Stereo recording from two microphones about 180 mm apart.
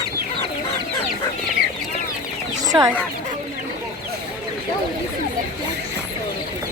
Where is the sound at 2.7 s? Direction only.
20° right (ahead or behind).